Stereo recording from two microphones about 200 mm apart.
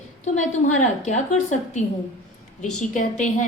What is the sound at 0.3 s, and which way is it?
A woman's voice, 35° left (ahead or behind).